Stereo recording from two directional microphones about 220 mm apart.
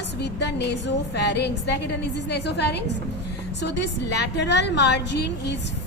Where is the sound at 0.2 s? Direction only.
50° left (ahead or behind).